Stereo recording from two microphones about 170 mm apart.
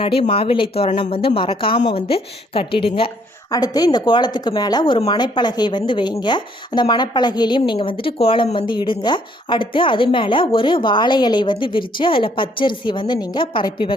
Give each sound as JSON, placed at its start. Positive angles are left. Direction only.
{"t": 0.0, "sound": "speech", "side_deg": 30}